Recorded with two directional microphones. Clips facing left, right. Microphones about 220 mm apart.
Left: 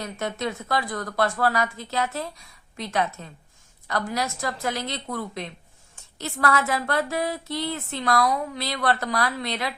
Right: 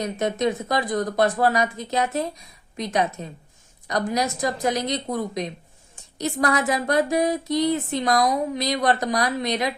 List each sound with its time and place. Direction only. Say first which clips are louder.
0.0 s speech: right 6 dB; 20° right (ahead or behind)